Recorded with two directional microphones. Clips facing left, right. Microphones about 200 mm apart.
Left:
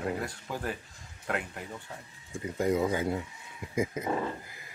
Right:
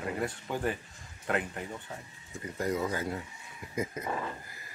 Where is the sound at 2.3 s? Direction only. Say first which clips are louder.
Left 4 dB; 15° left (ahead or behind).